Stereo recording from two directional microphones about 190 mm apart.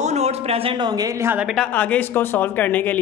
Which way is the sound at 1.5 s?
5° left (ahead or behind).